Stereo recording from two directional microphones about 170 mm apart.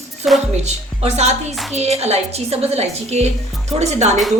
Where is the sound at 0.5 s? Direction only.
40° right (ahead or behind).